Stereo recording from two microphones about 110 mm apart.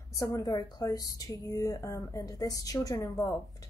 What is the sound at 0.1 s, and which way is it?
A woman's voice, 30° left (ahead or behind).